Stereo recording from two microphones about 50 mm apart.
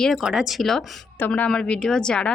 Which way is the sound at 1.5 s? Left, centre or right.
Centre.